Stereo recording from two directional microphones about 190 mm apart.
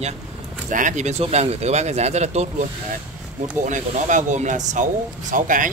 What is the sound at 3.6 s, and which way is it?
Speech, 40° right (ahead or behind).